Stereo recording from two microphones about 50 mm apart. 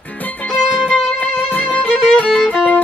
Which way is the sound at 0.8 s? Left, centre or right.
Left.